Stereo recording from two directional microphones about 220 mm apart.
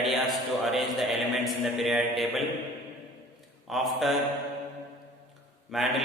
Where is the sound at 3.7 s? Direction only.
Centre (ahead or behind).